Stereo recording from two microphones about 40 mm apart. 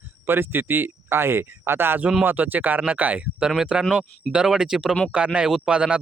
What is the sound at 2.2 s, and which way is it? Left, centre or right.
Speech, right.